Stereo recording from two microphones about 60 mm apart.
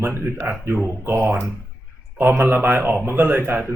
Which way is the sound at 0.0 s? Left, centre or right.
Right.